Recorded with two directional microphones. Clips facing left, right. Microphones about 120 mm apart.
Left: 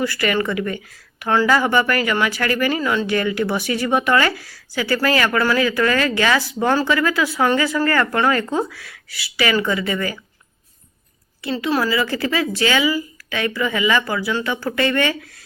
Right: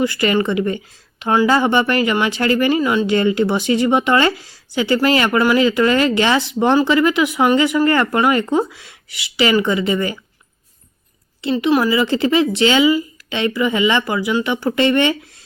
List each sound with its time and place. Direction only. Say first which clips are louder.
0.0 s speech: right 3 dB; 20° right (ahead or behind)
11.4 s speech: right 5 dB; 20° right (ahead or behind)